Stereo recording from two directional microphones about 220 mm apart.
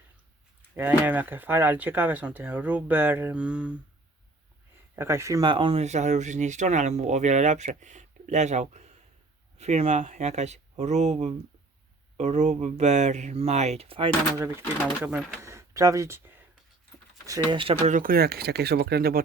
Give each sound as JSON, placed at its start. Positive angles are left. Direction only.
{"t": 0.8, "sound": "speech", "side_deg": -10}
{"t": 4.9, "sound": "speech", "side_deg": -10}
{"t": 14.3, "sound": "speech", "side_deg": -10}